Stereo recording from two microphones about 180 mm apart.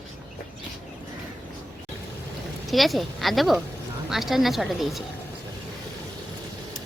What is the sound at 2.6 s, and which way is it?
Speech, centre (ahead or behind).